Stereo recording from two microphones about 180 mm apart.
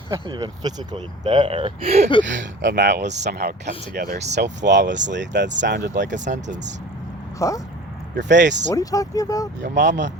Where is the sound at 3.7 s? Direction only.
30° left (ahead or behind).